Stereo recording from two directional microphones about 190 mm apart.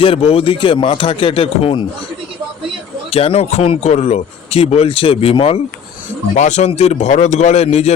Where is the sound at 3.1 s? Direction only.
30° left (ahead or behind).